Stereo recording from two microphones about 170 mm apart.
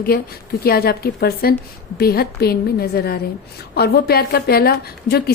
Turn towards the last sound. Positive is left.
turn(degrees=65)  # may be behind; listen again after turning